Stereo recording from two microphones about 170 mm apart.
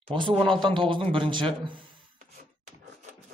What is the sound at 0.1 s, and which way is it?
Speech, 30° right (ahead or behind).